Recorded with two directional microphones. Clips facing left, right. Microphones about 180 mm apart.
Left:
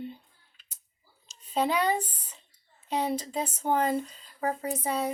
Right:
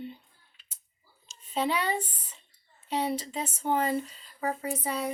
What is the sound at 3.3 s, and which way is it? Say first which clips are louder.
Speech: left 1 dB; 40° left (ahead or behind).